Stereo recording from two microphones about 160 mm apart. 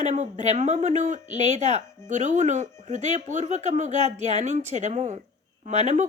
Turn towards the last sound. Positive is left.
turn(degrees=-45)  # may be behind; listen again after turning